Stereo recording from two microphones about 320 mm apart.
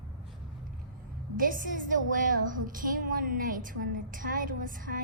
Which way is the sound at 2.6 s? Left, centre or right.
Right.